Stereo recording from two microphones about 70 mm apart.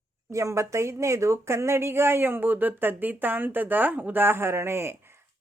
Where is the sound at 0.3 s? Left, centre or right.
Right.